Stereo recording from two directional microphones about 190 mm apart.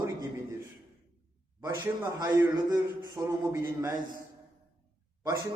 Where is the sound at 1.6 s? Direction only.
20° right (ahead or behind).